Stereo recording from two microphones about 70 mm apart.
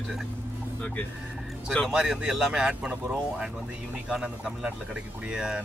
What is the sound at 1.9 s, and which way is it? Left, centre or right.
Speech, centre.